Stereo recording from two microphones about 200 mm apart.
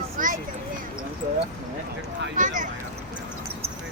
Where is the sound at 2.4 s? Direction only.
40° right (ahead or behind).